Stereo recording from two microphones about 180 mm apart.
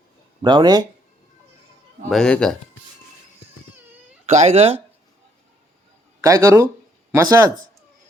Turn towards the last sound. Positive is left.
turn(degrees=-20)  # may be behind; listen again after turning